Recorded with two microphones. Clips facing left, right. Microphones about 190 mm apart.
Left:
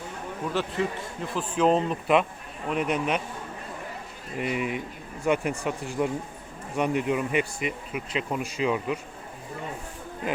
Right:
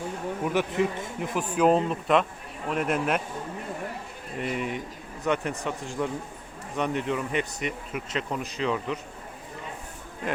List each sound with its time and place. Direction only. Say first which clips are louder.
0.4 s a man's voice: right 2 dB; 15° right (ahead or behind)
1.5 s speech: right 1 dB; 5° right (ahead or behind)
4.4 s speech: left 2 dB; 5° left (ahead or behind)